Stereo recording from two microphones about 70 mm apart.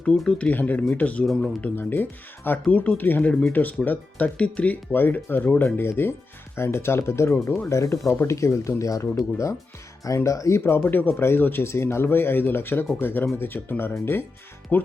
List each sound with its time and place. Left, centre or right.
0.3 s speech: centre
1.2 s speech: centre
1.7 s speech: left
10.2 s speech: left
10.8 s speech: left